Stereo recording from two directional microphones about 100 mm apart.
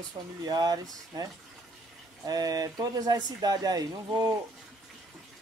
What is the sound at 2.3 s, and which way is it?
Speech, 40° right (ahead or behind).